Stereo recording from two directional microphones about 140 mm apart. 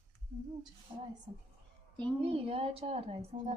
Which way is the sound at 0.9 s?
35° right (ahead or behind).